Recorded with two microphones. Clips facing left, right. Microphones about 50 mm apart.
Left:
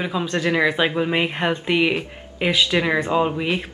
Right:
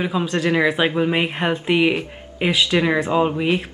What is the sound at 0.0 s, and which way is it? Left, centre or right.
Speech, centre.